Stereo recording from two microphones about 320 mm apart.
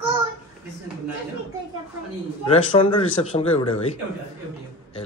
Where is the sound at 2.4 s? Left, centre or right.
Centre.